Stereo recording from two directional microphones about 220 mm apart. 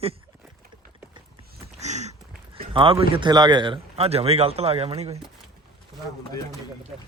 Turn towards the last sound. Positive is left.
turn(degrees=-25)  # may be behind; listen again after turning